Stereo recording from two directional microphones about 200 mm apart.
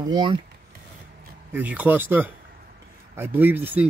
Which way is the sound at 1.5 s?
10° right (ahead or behind).